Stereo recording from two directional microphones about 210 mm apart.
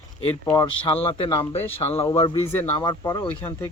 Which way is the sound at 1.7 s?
30° left (ahead or behind).